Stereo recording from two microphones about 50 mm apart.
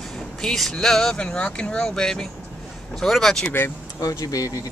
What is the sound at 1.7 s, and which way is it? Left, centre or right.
Speech, centre.